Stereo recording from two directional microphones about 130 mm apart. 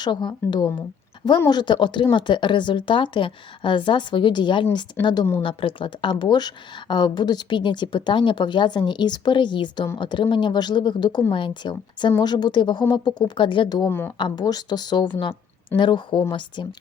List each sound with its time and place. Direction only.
0.0 s speech: 35° left (ahead or behind)